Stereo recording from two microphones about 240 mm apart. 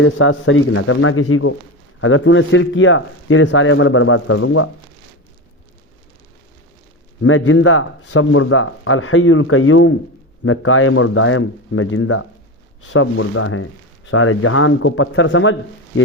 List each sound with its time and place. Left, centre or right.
0.0 s speech: left
7.2 s speech: left